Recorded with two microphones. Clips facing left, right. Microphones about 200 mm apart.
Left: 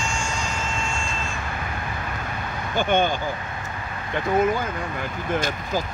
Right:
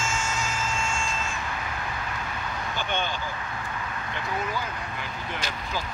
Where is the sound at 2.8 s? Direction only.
50° left (ahead or behind).